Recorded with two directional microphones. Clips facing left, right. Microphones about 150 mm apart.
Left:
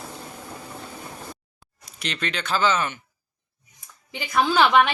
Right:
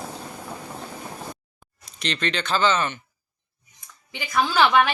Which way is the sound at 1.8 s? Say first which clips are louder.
Right 3 dB; 10° left (ahead or behind).